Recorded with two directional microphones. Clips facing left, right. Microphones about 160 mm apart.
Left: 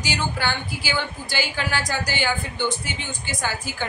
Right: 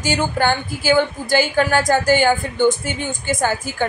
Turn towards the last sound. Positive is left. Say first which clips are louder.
# right 8 dB
turn(degrees=-50)  # may be behind; listen again after turning